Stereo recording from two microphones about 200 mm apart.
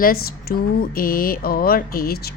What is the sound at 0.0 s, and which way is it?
Speech, 50° left (ahead or behind).